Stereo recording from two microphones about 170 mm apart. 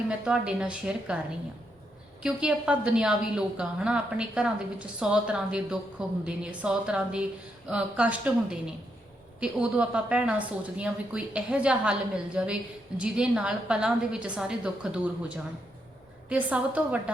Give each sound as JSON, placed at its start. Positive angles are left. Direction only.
{"t": 0.1, "sound": "a woman's voice", "side_deg": -5}
{"t": 2.2, "sound": "a woman's voice", "side_deg": -5}
{"t": 16.3, "sound": "a woman's voice", "side_deg": -10}